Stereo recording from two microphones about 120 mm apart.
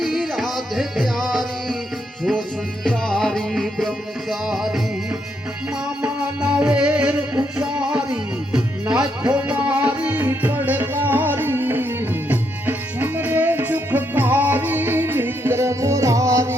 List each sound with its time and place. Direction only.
0.0 s music: centre (ahead or behind)
2.8 s music: 5° left (ahead or behind)
6.0 s music: 10° right (ahead or behind)